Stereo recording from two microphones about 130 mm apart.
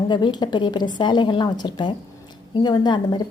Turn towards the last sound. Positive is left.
turn(degrees=35)  # may be behind; listen again after turning